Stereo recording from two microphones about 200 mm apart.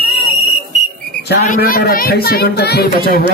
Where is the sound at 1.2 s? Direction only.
50° left (ahead or behind).